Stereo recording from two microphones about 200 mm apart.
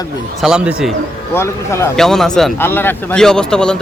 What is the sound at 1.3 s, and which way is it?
Speech, 15° left (ahead or behind).